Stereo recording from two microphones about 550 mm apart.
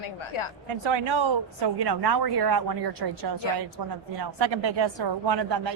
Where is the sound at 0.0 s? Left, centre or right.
Left.